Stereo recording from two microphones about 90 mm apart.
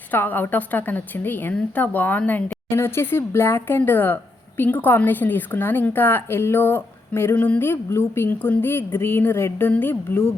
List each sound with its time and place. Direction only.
0.1 s speech: 20° left (ahead or behind)